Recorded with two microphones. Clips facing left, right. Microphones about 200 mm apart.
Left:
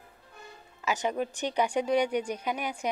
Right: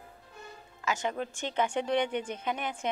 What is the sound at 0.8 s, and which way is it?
Speech, 15° left (ahead or behind).